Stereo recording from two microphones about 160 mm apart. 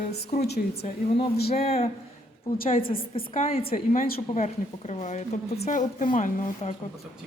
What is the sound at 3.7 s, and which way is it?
Speech, 60° left (ahead or behind).